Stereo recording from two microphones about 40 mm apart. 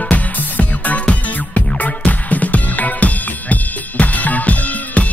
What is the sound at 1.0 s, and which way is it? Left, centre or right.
Music, left.